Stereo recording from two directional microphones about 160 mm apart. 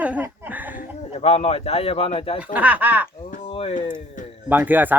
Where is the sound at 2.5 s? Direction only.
10° right (ahead or behind).